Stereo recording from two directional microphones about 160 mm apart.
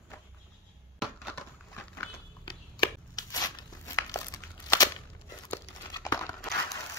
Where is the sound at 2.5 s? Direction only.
25° left (ahead or behind).